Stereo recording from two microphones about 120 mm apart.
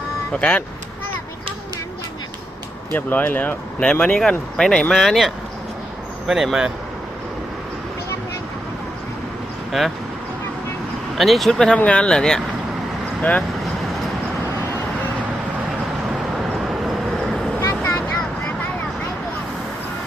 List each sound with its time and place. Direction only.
0.3 s speech: 10° left (ahead or behind)
2.9 s speech: 15° left (ahead or behind); by 6.7 s 5° right (ahead or behind)
9.7 s speech: centre (ahead or behind)
11.2 s speech: centre (ahead or behind)
16.6 s vehicle: centre (ahead or behind)
17.6 s vehicle: 25° left (ahead or behind)